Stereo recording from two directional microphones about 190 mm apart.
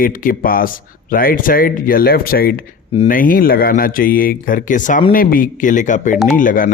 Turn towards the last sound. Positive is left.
turn(degrees=45)  # may be behind; listen again after turning